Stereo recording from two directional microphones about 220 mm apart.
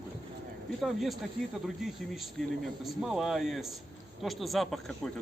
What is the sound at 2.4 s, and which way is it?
A man's voice, centre (ahead or behind).